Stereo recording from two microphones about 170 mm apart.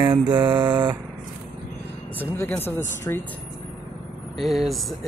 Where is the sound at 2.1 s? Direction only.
10° left (ahead or behind).